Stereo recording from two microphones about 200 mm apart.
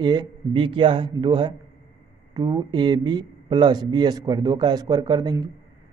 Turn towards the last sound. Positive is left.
turn(degrees=-20)  # may be behind; listen again after turning